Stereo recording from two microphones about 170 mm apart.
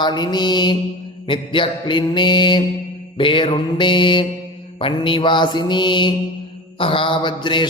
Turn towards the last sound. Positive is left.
turn(degrees=25)  # may be behind; listen again after turning